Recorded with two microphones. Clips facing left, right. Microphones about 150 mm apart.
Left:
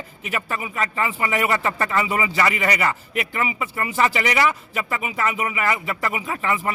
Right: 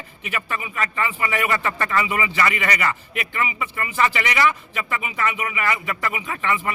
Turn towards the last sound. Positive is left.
turn(degrees=40)  # may be behind; listen again after turning